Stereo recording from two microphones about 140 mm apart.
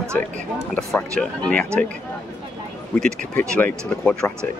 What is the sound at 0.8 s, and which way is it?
Speech, 5° left (ahead or behind).